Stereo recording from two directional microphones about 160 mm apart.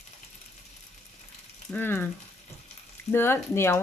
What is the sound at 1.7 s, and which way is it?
Stir, 10° left (ahead or behind).